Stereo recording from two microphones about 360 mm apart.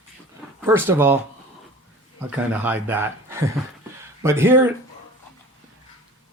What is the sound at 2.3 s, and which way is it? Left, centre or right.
Speech, centre.